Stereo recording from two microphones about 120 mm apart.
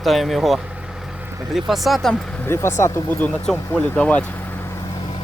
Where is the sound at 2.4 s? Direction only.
20° left (ahead or behind).